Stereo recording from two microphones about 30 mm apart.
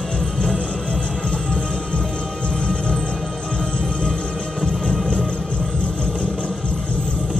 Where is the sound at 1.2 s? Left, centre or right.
Left.